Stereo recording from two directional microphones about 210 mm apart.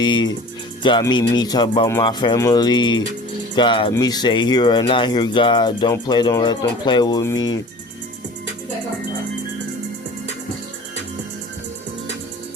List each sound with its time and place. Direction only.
0.0 s speech: 20° left (ahead or behind)